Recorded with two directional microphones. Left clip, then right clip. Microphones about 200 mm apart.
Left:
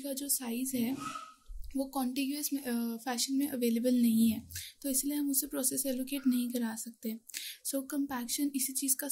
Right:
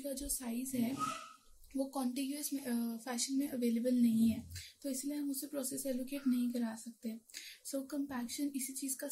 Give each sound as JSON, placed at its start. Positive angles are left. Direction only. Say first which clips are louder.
{"t": 0.0, "sound": "speech", "louder": "left 4 dB", "side_deg": 50}